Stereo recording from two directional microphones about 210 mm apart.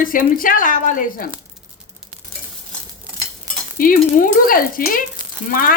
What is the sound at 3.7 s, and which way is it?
A woman's voice, 40° left (ahead or behind).